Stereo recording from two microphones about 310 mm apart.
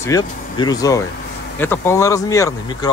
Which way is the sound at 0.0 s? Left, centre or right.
Centre.